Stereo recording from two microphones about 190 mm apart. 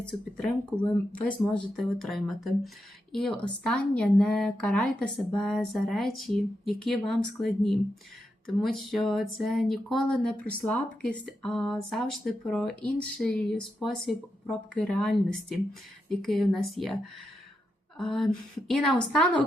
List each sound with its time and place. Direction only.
0.0 s speech: 5° left (ahead or behind)